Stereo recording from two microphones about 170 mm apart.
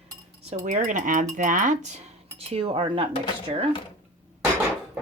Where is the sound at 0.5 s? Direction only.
50° right (ahead or behind); by 3.1 s 30° right (ahead or behind).